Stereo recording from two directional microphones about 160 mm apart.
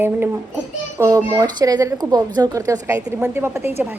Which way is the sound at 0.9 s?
15° right (ahead or behind).